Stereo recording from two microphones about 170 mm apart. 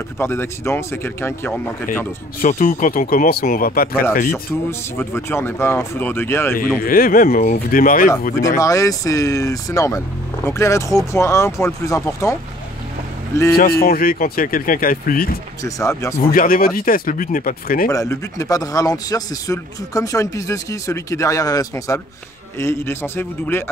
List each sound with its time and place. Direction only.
0.2 s speech: 15° left (ahead or behind)
2.4 s speech: 50° left (ahead or behind)
4.3 s speech: 15° left (ahead or behind)
6.8 s speech: 55° left (ahead or behind)
8.5 s speech: 20° left (ahead or behind)
13.6 s speech: 60° left (ahead or behind)
15.6 s speech: 20° left (ahead or behind)
16.3 s speech: 55° left (ahead or behind)
17.8 s speech: 20° left (ahead or behind)